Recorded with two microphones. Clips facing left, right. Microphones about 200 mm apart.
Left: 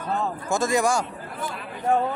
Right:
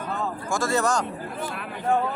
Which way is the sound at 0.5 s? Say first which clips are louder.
Left 2 dB; 15° left (ahead or behind).